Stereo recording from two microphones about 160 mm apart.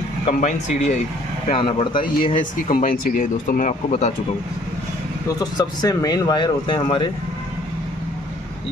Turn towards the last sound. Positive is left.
turn(degrees=30)  # may be behind; listen again after turning